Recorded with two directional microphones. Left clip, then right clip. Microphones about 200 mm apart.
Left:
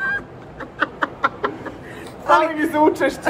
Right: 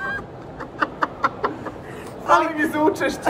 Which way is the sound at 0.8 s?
5° right (ahead or behind).